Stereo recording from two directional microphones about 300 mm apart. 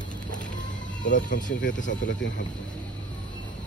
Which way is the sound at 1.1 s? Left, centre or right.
Left.